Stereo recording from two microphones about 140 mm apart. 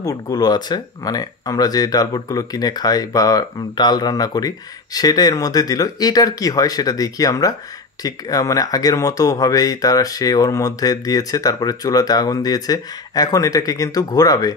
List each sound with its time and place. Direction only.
0.0 s speech: 30° left (ahead or behind)